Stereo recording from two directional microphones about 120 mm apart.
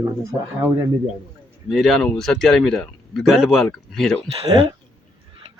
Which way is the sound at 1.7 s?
Centre (ahead or behind).